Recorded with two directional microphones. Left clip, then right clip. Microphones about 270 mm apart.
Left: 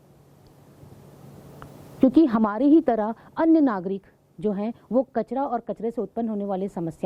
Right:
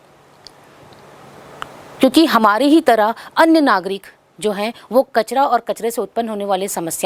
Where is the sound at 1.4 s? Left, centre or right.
Centre.